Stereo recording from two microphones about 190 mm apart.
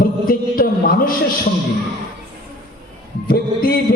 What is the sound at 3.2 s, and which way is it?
Speech, 50° left (ahead or behind).